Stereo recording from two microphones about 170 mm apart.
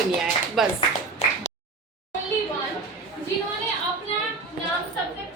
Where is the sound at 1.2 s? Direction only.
40° left (ahead or behind).